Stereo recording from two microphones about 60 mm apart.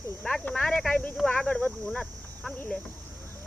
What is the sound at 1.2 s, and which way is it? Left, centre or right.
Speech, centre.